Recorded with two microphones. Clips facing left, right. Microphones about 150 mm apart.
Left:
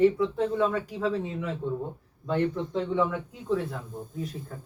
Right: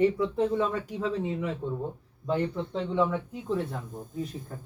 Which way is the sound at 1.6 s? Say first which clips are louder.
Left 2 dB; 20° right (ahead or behind).